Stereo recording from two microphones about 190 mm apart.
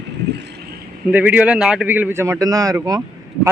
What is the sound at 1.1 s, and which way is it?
A man's voice, 10° right (ahead or behind).